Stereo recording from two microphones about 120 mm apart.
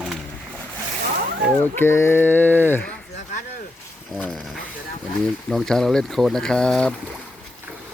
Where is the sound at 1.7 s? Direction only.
20° left (ahead or behind).